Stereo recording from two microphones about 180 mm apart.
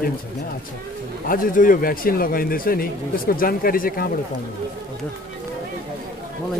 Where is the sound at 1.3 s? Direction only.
50° left (ahead or behind).